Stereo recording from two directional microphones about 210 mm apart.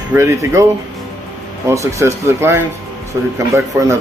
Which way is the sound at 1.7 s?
15° right (ahead or behind).